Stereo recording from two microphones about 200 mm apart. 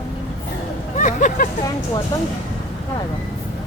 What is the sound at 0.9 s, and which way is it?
Vehicle, 40° left (ahead or behind).